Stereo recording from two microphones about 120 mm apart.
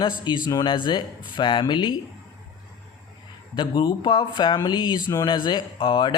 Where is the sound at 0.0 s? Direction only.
40° left (ahead or behind).